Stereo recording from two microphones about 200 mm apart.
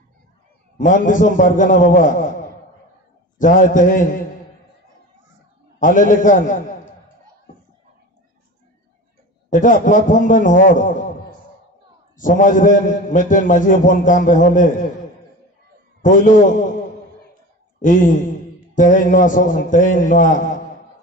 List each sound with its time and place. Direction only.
0.7 s a man's voice: 40° left (ahead or behind)
3.3 s a man's voice: 40° left (ahead or behind)
5.8 s a man's voice: 40° left (ahead or behind)
9.5 s a man's voice: 40° left (ahead or behind)
12.2 s a man's voice: 40° left (ahead or behind)
16.0 s a man's voice: 40° left (ahead or behind)
17.8 s a man's voice: 40° left (ahead or behind)